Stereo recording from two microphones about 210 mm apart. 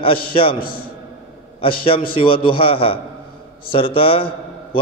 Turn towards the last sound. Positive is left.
turn(degrees=25)  # may be behind; listen again after turning